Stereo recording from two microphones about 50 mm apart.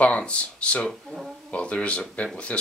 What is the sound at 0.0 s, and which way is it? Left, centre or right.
Speech, left.